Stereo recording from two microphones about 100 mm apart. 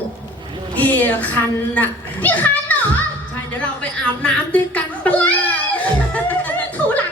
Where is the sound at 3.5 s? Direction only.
10° left (ahead or behind).